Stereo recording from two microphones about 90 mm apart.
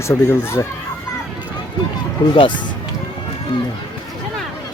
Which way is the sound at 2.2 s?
50° left (ahead or behind).